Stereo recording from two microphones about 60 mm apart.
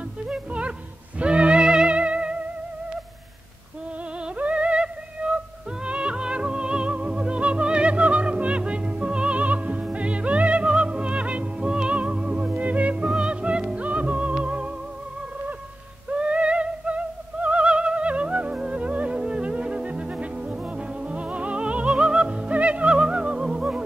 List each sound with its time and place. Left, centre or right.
0.2 s music: centre
4.2 s music: right
13.1 s music: centre
16.1 s music: centre